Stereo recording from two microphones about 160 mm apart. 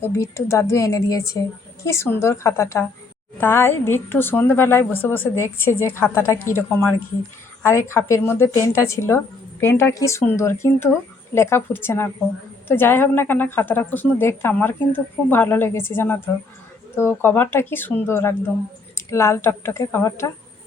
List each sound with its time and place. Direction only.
0.0 s a woman's voice: 15° left (ahead or behind)